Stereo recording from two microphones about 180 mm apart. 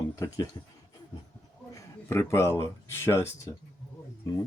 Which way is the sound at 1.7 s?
15° left (ahead or behind).